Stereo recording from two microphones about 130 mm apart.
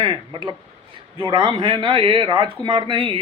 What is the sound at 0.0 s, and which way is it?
Speech, 35° right (ahead or behind).